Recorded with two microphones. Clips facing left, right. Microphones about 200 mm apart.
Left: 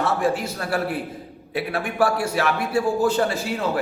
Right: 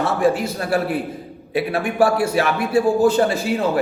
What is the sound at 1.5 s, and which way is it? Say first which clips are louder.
A man's voice: right 5 dB; 15° right (ahead or behind).